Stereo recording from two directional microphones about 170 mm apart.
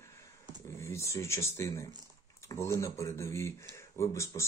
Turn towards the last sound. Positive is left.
turn(degrees=15)  # may be behind; listen again after turning